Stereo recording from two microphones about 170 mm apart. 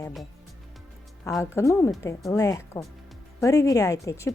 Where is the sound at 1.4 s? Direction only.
20° left (ahead or behind).